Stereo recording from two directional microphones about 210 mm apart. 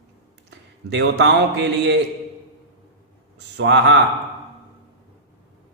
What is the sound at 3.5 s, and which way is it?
Speech, 55° right (ahead or behind).